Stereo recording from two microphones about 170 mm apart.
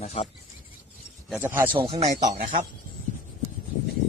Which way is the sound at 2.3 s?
55° right (ahead or behind).